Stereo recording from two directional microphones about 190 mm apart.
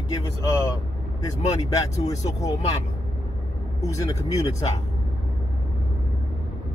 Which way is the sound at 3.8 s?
15° left (ahead or behind).